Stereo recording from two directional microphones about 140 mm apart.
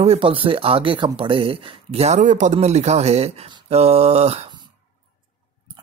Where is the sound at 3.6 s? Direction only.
50° right (ahead or behind).